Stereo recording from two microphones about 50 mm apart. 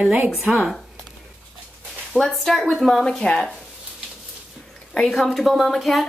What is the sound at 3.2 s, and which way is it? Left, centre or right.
Speech, centre.